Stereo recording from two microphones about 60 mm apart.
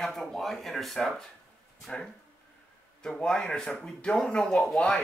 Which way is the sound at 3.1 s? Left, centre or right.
Centre.